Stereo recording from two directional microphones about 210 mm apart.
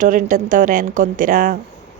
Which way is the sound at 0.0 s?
40° right (ahead or behind).